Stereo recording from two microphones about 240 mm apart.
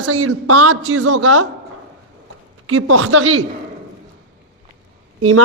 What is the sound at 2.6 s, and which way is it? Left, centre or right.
Speech, right.